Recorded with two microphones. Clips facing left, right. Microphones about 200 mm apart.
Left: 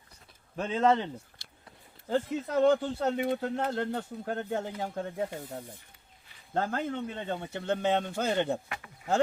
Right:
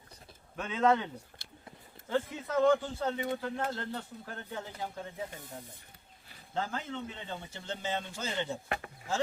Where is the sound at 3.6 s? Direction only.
45° left (ahead or behind).